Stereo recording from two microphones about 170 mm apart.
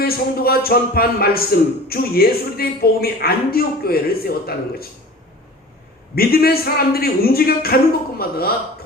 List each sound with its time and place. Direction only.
0.0 s a man's voice: 60° left (ahead or behind)
6.1 s a man's voice: 65° left (ahead or behind)